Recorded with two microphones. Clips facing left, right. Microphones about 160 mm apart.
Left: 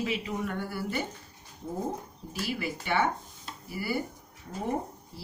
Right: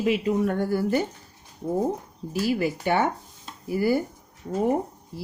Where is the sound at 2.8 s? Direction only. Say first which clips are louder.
Right 5 dB; 45° right (ahead or behind).